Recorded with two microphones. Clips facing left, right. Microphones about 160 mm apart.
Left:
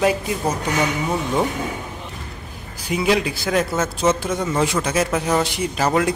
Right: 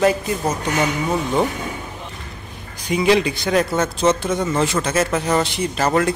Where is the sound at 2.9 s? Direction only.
5° left (ahead or behind).